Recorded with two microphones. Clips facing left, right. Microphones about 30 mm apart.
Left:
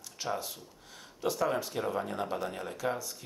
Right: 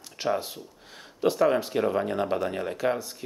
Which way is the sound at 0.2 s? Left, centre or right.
Right.